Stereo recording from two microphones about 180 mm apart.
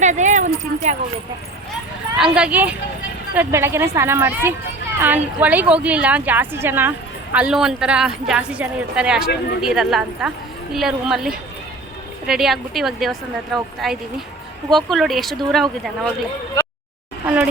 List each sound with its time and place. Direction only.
0.0 s keys jangling: 40° right (ahead or behind)
0.6 s a sound: 40° right (ahead or behind)
2.1 s a woman's voice: 5° right (ahead or behind)
17.2 s speech: 5° right (ahead or behind)